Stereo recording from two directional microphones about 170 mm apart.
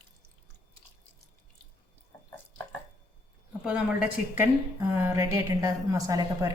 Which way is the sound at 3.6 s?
5° right (ahead or behind).